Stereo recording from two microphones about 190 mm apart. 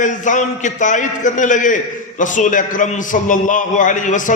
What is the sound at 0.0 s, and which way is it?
A man's voice, 40° left (ahead or behind).